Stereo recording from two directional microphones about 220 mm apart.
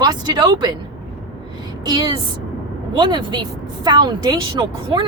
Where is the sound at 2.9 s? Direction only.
20° right (ahead or behind).